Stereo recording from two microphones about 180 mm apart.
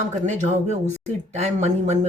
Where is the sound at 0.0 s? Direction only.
40° right (ahead or behind).